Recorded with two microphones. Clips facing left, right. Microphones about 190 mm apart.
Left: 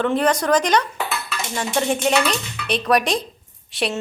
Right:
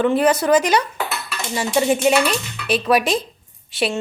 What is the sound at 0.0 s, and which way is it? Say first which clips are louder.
A woman's voice: right 3 dB; 5° right (ahead or behind).